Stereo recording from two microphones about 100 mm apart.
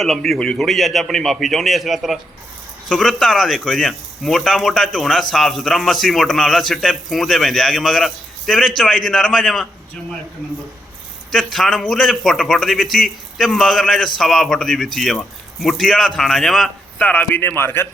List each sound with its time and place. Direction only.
0.0 s speech: centre (ahead or behind)
11.3 s speech: centre (ahead or behind)
17.0 s a man's voice: 15° left (ahead or behind)